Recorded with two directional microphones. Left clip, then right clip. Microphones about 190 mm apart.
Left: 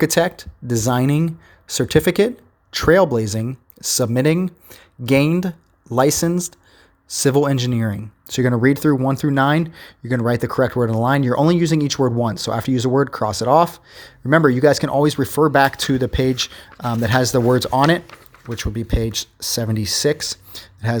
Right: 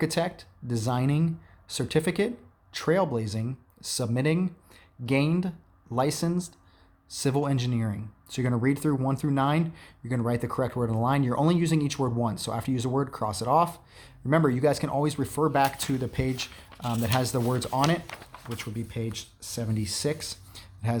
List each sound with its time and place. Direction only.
0.0 s speech: 35° left (ahead or behind)